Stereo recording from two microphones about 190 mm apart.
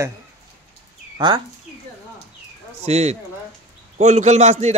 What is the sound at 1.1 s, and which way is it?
Speech, 25° right (ahead or behind).